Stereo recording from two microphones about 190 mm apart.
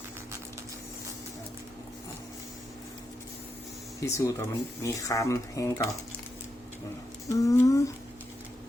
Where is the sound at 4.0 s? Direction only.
15° left (ahead or behind).